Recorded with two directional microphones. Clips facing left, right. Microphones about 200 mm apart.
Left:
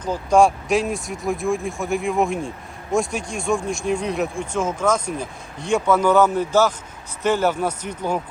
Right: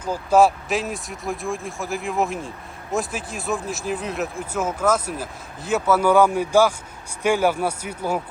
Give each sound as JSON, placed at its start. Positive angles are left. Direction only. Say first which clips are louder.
{"t": 0.0, "sound": "speech", "louder": "left 1 dB", "side_deg": -5}